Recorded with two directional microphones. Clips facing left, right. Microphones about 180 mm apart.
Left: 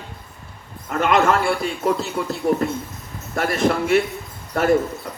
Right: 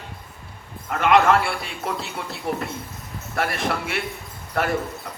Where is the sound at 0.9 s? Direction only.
40° left (ahead or behind).